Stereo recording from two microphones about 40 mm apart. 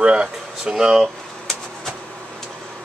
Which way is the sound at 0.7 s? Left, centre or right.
Centre.